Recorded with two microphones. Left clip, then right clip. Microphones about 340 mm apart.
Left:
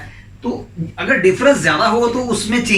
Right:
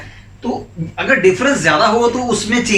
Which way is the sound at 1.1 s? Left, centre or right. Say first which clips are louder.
Even; centre.